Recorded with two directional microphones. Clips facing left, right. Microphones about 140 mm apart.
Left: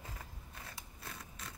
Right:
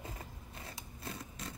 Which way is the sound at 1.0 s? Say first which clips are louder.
Right 6 dB; 30° right (ahead or behind).